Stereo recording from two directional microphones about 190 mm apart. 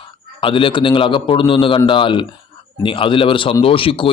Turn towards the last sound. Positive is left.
turn(degrees=30)  # may be behind; listen again after turning